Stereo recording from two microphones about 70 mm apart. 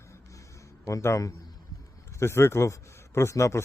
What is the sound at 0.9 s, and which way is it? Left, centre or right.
Speech, left.